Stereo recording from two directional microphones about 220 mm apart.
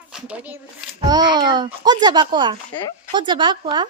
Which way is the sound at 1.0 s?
20° right (ahead or behind).